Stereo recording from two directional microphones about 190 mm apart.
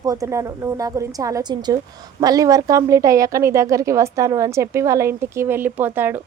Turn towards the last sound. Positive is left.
turn(degrees=-10)  # may be behind; listen again after turning